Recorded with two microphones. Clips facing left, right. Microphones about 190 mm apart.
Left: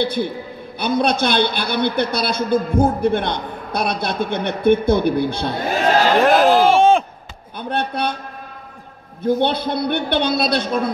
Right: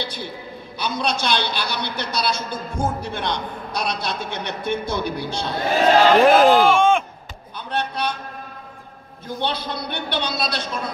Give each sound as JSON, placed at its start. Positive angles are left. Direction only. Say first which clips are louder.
{"t": 0.0, "sound": "a man's voice", "louder": "left 10 dB", "side_deg": 55}
{"t": 6.2, "sound": "speech", "louder": "left 1 dB", "side_deg": 0}
{"t": 6.6, "sound": "a sound", "louder": "left 3 dB", "side_deg": 35}
{"t": 7.5, "sound": "speech", "louder": "left 4 dB", "side_deg": 55}
{"t": 9.2, "sound": "a man's voice", "louder": "left 9 dB", "side_deg": 55}